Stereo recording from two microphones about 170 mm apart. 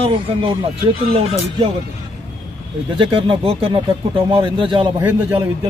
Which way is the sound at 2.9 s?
30° right (ahead or behind).